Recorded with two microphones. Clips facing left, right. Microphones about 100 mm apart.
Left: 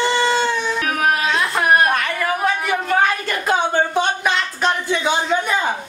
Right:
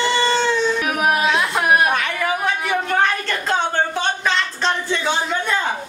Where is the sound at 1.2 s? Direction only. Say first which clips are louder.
Even; centre (ahead or behind).